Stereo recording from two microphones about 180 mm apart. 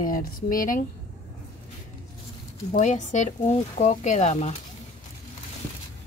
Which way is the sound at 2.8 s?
40° left (ahead or behind).